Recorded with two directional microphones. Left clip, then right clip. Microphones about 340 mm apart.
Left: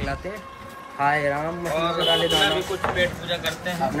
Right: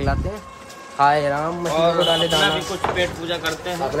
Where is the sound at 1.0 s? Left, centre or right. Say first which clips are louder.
Right 5 dB; centre.